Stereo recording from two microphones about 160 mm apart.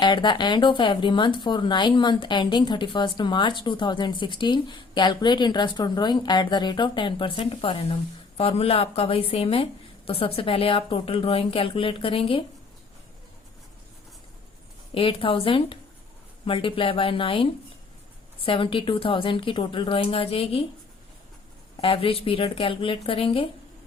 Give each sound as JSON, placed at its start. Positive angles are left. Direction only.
{"t": 0.0, "sound": "speech", "side_deg": 30}
{"t": 14.9, "sound": "speech", "side_deg": 35}
{"t": 21.8, "sound": "speech", "side_deg": 35}